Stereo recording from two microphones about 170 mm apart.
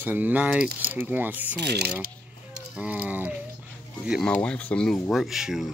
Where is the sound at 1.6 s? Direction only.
70° right (ahead or behind).